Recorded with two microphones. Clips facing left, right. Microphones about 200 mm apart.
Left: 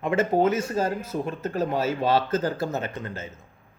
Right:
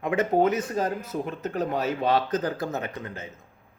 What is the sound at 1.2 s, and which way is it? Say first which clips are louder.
Speech: left 2 dB; 15° right (ahead or behind).